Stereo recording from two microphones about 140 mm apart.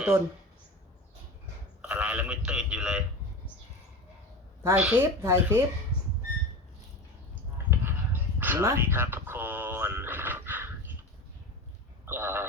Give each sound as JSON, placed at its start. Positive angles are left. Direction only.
{"t": 1.8, "sound": "a man's voice", "side_deg": -10}
{"t": 4.6, "sound": "speech", "side_deg": -15}
{"t": 5.9, "sound": "whistling", "side_deg": 15}
{"t": 7.7, "sound": "a sound", "side_deg": -15}
{"t": 12.0, "sound": "speech", "side_deg": -15}